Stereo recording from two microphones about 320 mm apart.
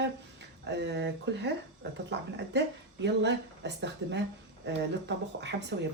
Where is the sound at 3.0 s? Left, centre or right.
Right.